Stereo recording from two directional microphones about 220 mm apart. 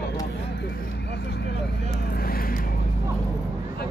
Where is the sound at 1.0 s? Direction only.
50° left (ahead or behind).